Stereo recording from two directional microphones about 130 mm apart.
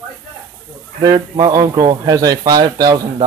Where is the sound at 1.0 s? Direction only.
30° right (ahead or behind).